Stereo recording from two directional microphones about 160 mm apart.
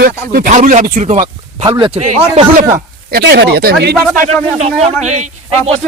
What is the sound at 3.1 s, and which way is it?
Speech, 80° right.